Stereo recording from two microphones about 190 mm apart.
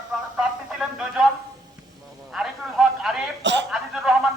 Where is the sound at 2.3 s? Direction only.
Centre (ahead or behind).